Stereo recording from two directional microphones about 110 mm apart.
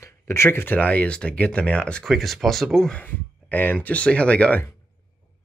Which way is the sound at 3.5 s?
15° left (ahead or behind).